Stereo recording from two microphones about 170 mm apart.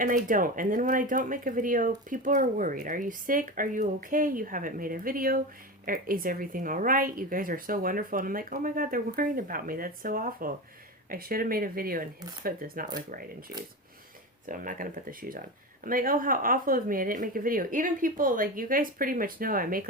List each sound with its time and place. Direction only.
0.0 s speech: 55° right (ahead or behind)
14.4 s speech: 50° right (ahead or behind)